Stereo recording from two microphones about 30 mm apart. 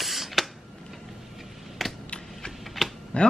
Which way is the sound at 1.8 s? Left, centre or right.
Centre.